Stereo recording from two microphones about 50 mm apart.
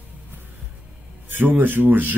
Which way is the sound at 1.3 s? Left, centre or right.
Right.